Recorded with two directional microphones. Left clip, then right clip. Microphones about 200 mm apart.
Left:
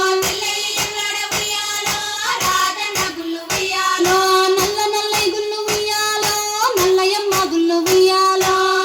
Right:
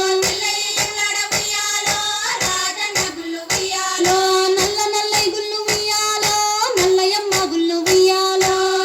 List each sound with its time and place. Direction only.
4.3 s music: centre (ahead or behind)
7.9 s music: 15° right (ahead or behind)